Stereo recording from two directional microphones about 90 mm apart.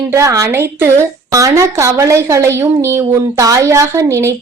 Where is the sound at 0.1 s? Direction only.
35° right (ahead or behind).